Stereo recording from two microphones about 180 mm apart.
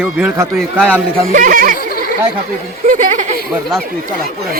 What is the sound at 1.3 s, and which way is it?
Speech, 50° right (ahead or behind).